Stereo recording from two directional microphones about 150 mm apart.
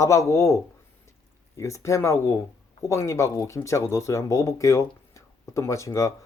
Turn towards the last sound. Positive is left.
turn(degrees=20)  # may be behind; listen again after turning